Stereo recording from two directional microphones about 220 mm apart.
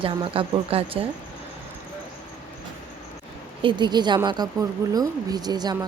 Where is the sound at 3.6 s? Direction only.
20° right (ahead or behind).